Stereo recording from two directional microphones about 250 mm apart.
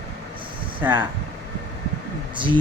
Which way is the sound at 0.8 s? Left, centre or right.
Centre.